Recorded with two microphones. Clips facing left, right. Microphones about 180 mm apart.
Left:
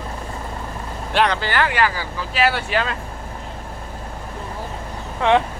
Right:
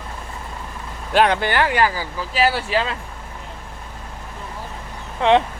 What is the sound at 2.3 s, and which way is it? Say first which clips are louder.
Speech: right 1 dB; 35° right (ahead or behind).